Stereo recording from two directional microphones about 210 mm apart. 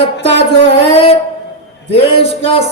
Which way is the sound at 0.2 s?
55° right (ahead or behind).